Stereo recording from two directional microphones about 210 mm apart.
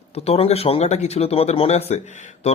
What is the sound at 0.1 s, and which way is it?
Speech, 30° left (ahead or behind).